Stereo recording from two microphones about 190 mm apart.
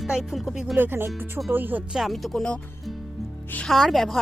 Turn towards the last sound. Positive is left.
turn(degrees=0)  # may be behind; listen again after turning